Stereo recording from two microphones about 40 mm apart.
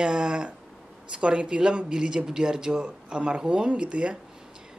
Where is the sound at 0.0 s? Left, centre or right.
Right.